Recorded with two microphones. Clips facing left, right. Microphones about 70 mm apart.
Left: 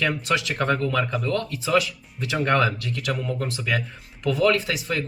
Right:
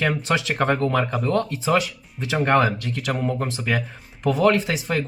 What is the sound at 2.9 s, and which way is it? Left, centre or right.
Speech, right.